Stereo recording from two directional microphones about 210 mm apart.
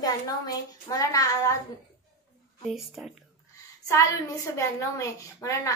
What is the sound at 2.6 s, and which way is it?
Speech, centre (ahead or behind).